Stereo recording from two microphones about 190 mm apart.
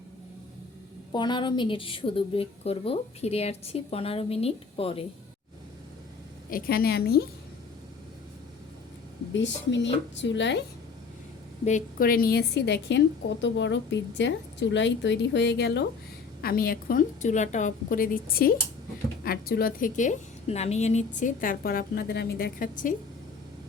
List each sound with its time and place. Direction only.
1.1 s a woman's voice: 25° left (ahead or behind)
6.5 s a woman's voice: 55° left (ahead or behind)
9.3 s a woman's voice: 70° left (ahead or behind)
11.6 s a woman's voice: 45° left (ahead or behind)